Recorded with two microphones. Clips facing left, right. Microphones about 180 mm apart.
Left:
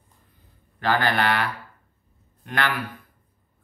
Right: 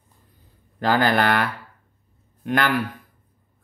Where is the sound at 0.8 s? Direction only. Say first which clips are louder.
Right 3 dB; 40° right (ahead or behind).